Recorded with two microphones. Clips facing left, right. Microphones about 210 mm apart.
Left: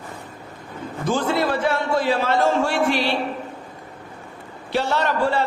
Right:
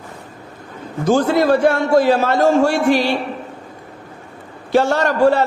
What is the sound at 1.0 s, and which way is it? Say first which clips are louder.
A man's voice: right 7 dB; 45° right (ahead or behind).